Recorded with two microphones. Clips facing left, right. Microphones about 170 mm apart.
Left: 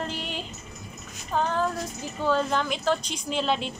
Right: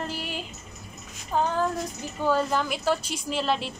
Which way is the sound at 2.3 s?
5° right (ahead or behind).